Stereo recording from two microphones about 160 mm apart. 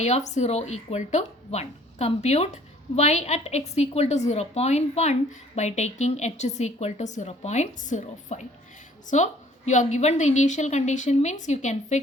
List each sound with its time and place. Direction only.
0.0 s speech: 45° left (ahead or behind)